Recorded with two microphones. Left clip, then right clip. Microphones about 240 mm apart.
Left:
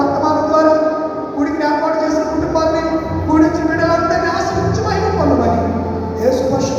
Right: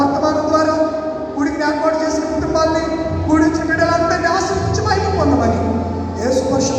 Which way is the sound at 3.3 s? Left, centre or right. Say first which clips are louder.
Left 2 dB; right.